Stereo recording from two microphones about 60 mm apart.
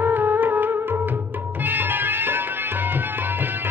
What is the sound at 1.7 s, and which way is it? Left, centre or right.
Music, right.